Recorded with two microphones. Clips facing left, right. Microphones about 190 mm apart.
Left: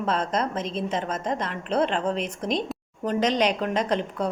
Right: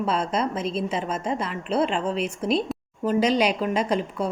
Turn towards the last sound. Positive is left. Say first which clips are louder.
# right 1 dB
turn(degrees=-10)  # may be behind; listen again after turning